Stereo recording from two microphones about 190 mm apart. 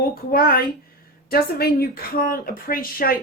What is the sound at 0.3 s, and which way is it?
Speech, 50° left (ahead or behind).